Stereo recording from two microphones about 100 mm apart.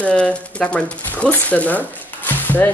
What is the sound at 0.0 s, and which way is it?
Speech, 10° left (ahead or behind).